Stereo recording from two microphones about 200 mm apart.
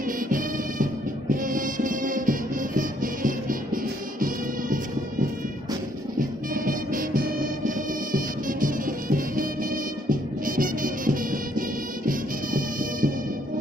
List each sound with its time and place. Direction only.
1.3 s music: 45° right (ahead or behind)
6.1 s music: 45° right (ahead or behind)